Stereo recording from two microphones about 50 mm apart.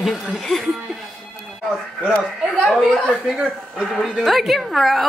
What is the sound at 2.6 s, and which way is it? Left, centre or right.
A woman's voice, centre.